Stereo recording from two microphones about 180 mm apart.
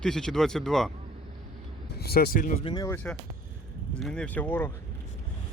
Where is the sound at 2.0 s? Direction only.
60° left (ahead or behind).